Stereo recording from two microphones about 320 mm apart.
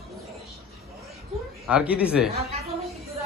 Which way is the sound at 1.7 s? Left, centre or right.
Centre.